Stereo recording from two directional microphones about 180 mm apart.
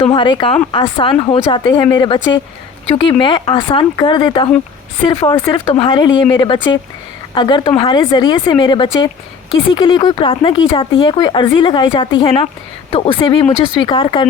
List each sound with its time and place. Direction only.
0.0 s speech: 30° left (ahead or behind)